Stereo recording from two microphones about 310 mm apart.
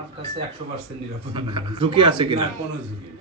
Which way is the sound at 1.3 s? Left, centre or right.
Centre.